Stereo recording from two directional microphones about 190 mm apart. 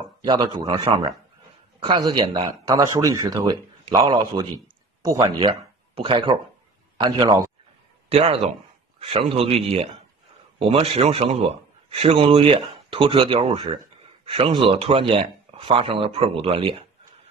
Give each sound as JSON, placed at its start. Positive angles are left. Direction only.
{"t": 0.2, "sound": "a man's voice", "side_deg": -25}